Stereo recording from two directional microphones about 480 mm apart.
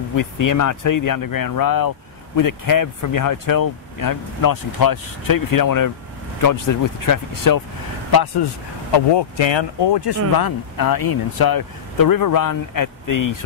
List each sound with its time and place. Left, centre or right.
0.1 s speech: left
8.9 s speech: left
10.3 s speech: left